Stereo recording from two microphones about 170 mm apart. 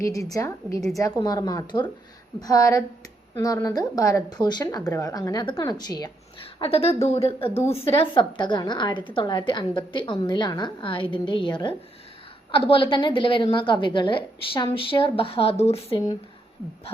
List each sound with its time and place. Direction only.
0.0 s a woman's voice: 20° left (ahead or behind)
6.4 s a woman's voice: 35° left (ahead or behind)
7.6 s a woman's voice: 15° left (ahead or behind)
7.9 s a woman's voice: 30° left (ahead or behind)